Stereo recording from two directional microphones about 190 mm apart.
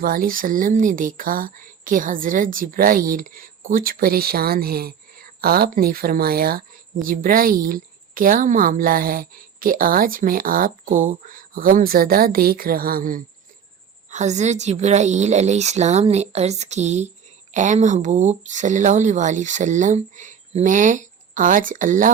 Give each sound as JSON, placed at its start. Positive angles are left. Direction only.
{"t": 0.0, "sound": "speech", "side_deg": -50}